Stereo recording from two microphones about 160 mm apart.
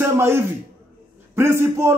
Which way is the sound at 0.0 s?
15° right (ahead or behind).